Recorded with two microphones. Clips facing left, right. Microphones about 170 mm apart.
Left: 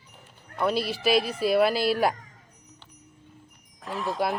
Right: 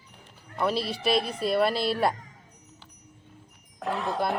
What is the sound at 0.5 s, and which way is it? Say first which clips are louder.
Speech: left 1 dB; centre (ahead or behind).